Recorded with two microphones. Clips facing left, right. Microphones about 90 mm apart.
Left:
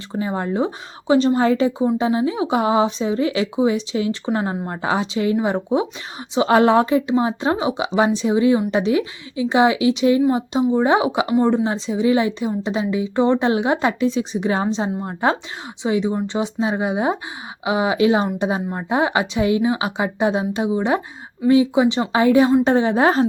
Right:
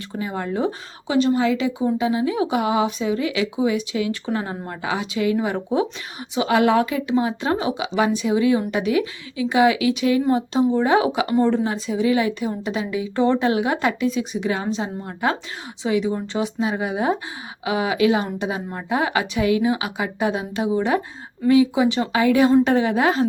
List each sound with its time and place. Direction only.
0.1 s a woman's voice: 30° left (ahead or behind)